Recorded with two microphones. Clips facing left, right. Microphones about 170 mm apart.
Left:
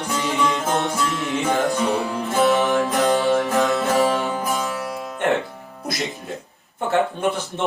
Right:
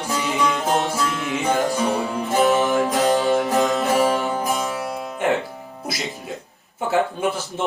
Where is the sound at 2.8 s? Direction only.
10° right (ahead or behind).